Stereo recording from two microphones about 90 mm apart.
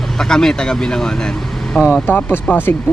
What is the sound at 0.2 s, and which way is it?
Speech, 5° left (ahead or behind).